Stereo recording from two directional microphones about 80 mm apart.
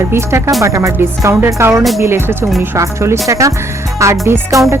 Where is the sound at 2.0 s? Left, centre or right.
Right.